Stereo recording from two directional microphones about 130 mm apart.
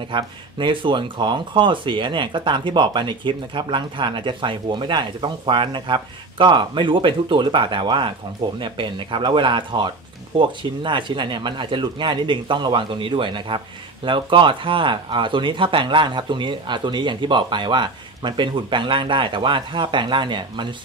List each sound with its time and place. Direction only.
0.1 s speech: 40° right (ahead or behind)